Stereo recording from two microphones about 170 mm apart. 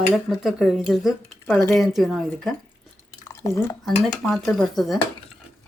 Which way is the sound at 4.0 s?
Centre (ahead or behind).